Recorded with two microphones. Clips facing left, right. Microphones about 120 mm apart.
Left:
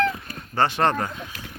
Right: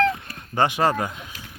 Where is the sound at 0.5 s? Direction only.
15° right (ahead or behind).